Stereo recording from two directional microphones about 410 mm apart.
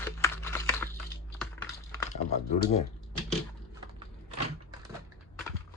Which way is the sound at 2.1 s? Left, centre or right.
Centre.